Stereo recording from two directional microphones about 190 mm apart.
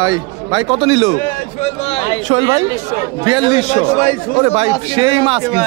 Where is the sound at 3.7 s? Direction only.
40° left (ahead or behind).